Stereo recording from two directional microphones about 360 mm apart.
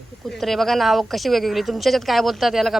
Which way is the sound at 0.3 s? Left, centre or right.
Centre.